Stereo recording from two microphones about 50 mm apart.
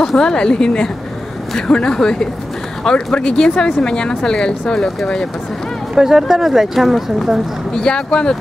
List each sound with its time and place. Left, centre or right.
0.0 s a woman's voice: centre
5.9 s speech: centre
7.7 s a woman's voice: centre